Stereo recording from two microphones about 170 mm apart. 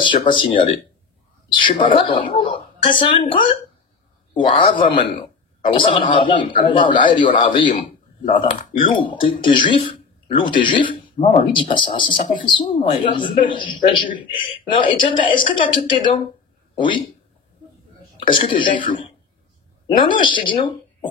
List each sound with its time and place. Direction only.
0.0 s a man's voice: 30° left (ahead or behind)
1.5 s a man's voice: 30° left (ahead or behind)
18.2 s a man's voice: 30° left (ahead or behind)
20.1 s speech: 30° left (ahead or behind)